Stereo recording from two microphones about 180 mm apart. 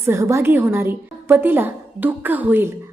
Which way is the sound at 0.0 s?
15° right (ahead or behind).